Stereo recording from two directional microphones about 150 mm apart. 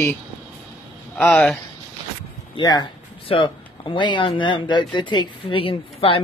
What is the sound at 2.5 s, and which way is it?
Speech, 25° left (ahead or behind).